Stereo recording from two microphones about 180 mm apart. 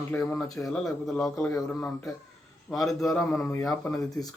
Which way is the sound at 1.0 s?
5° left (ahead or behind).